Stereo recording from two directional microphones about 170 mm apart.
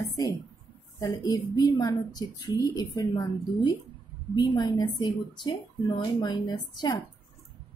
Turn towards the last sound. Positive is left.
turn(degrees=25)  # may be behind; listen again after turning